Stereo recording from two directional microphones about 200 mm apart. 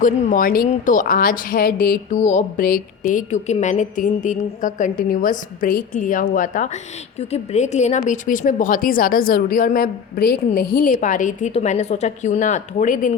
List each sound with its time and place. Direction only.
0.0 s a woman's voice: 45° left (ahead or behind)